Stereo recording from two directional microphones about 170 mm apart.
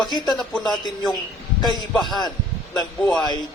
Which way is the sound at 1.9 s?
Centre (ahead or behind).